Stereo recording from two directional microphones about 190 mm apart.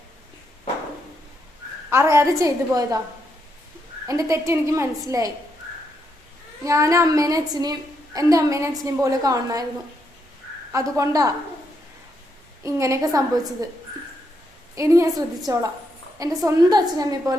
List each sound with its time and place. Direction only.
1.9 s a woman's voice: 15° right (ahead or behind)
4.0 s a woman's voice: 15° right (ahead or behind)
6.7 s a woman's voice: 15° right (ahead or behind)
10.9 s a woman's voice: 15° right (ahead or behind)
12.6 s a woman's voice: 15° right (ahead or behind)
14.8 s a woman's voice: 15° right (ahead or behind)